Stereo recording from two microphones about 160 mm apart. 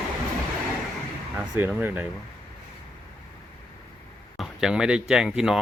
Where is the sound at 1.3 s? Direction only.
5° right (ahead or behind).